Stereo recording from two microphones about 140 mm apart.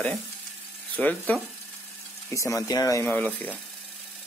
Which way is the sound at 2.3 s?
25° left (ahead or behind).